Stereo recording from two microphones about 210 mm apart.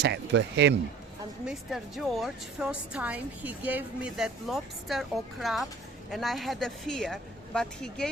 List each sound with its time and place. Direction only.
0.0 s speech: 55° right (ahead or behind)
1.5 s a woman's voice: centre (ahead or behind)